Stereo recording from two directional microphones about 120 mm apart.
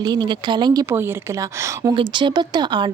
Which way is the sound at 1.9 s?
40° right (ahead or behind).